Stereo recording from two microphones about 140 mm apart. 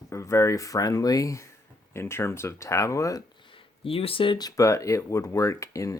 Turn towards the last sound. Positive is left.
turn(degrees=25)  # may be behind; listen again after turning